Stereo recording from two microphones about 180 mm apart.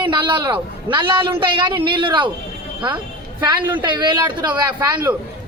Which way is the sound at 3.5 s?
25° right (ahead or behind).